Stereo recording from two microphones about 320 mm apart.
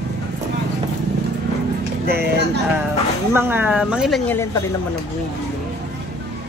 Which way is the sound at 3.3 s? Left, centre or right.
Centre.